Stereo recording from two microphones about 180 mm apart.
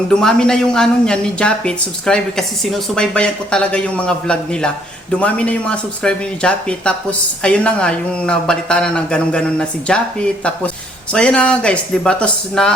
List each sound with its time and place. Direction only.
0.1 s speech: 5° left (ahead or behind)